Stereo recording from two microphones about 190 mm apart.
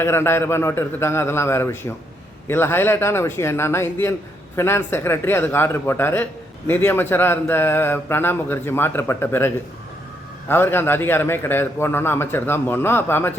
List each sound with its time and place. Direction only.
0.0 s a man's voice: 15° left (ahead or behind)
10.5 s a man's voice: 10° left (ahead or behind)